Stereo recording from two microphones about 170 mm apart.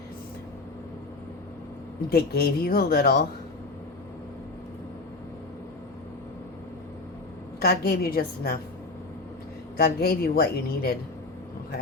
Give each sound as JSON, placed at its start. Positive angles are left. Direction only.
{"t": 2.0, "sound": "speech", "side_deg": 65}
{"t": 7.6, "sound": "speech", "side_deg": 70}
{"t": 9.7, "sound": "a woman's voice", "side_deg": 70}